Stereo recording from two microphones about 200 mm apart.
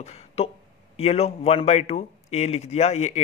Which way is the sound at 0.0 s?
30° left (ahead or behind).